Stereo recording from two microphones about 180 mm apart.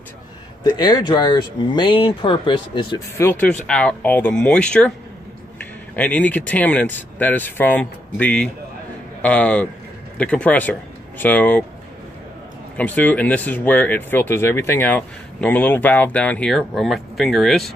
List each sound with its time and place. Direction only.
0.7 s speech: 25° left (ahead or behind)
3.2 s speech: 10° left (ahead or behind)
12.7 s speech: 10° left (ahead or behind)